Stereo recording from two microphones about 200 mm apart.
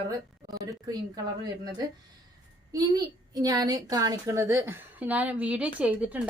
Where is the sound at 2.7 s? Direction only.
20° right (ahead or behind).